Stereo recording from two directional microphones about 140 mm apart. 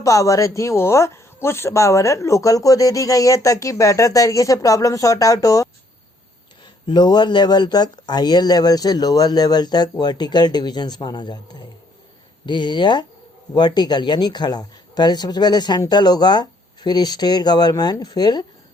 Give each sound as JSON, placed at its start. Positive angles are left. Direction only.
{"t": 0.0, "sound": "speech", "side_deg": 25}
{"t": 6.8, "sound": "speech", "side_deg": 30}
{"t": 12.5, "sound": "speech", "side_deg": 35}